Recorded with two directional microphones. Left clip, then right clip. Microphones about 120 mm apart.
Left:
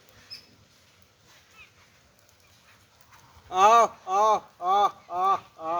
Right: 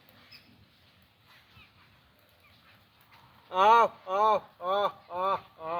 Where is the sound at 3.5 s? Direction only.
45° left (ahead or behind).